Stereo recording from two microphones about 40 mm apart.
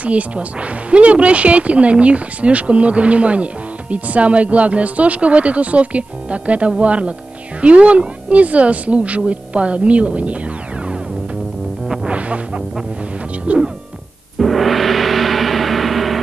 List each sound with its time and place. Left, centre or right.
0.0 s speech: right
12.1 s music: right
13.5 s speech: right
14.4 s gong: centre